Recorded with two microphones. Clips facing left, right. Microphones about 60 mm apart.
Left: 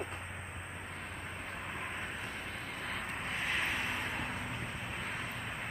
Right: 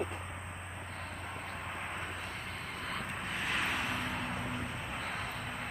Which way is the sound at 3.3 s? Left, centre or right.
Left.